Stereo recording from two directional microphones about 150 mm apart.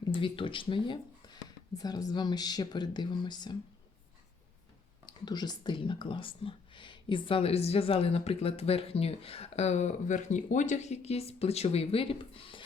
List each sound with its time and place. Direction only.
0.1 s speech: 35° left (ahead or behind)
5.0 s speech: 30° left (ahead or behind)